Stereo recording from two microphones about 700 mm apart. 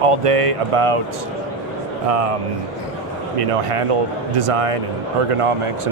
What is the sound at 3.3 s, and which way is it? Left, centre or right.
Speech, right.